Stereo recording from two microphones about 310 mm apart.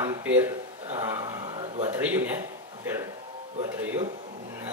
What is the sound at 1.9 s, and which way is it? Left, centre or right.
Speech, centre.